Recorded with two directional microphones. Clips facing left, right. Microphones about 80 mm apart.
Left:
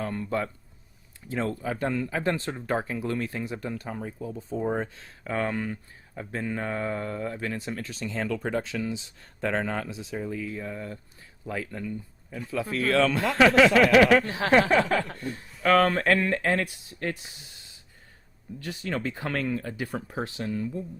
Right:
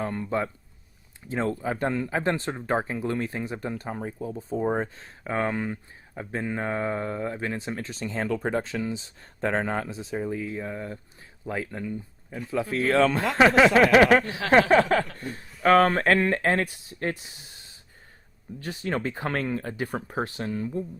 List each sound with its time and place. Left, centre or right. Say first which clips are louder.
0.0 s speech: right 1 dB; right
14.3 s speech: left 2 dB; left
14.5 s speech: right 3 dB; right
18.6 s speech: right 2 dB; right